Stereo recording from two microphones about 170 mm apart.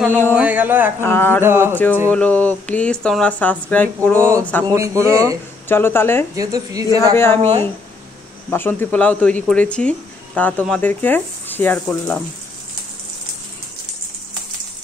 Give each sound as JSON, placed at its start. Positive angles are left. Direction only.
{"t": 0.3, "sound": "speech", "side_deg": -10}
{"t": 1.0, "sound": "speech", "side_deg": 15}
{"t": 1.4, "sound": "speech", "side_deg": -15}
{"t": 2.0, "sound": "speech", "side_deg": 10}
{"t": 4.7, "sound": "a woman's voice", "side_deg": -20}
{"t": 5.7, "sound": "speech", "side_deg": 15}
{"t": 6.3, "sound": "a woman's voice", "side_deg": -20}
{"t": 8.5, "sound": "speech", "side_deg": 15}